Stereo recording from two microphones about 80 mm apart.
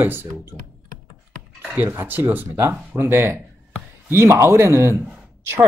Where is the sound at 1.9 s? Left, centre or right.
Right.